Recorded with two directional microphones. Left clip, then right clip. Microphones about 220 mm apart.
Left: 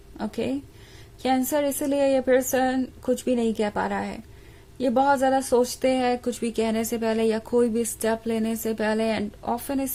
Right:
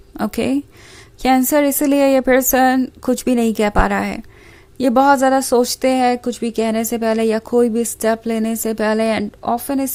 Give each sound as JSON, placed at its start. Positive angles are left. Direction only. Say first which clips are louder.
{"t": 0.2, "sound": "a woman's voice", "louder": "right 9 dB", "side_deg": -35}